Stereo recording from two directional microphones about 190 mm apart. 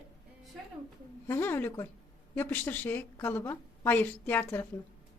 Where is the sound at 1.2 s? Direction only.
15° left (ahead or behind).